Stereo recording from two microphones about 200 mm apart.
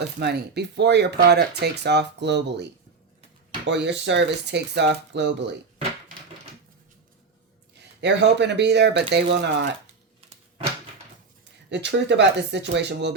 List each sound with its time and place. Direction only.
0.2 s speech: 55° right (ahead or behind)
3.7 s speech: 60° right (ahead or behind)
7.8 s speech: 60° right (ahead or behind)
11.7 s speech: 60° right (ahead or behind)